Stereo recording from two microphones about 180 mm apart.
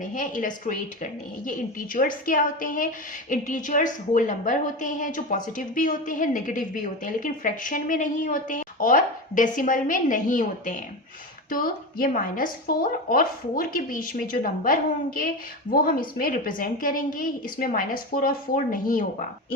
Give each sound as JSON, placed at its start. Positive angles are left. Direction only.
{"t": 0.0, "sound": "a woman's voice", "side_deg": 45}